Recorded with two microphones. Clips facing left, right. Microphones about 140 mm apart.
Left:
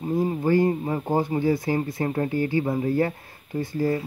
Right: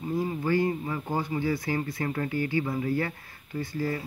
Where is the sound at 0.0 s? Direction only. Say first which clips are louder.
Left 5 dB; 35° left (ahead or behind).